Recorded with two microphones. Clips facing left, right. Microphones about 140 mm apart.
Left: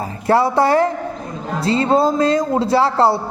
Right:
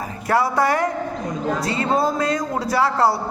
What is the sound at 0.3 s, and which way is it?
Speech, 30° left (ahead or behind).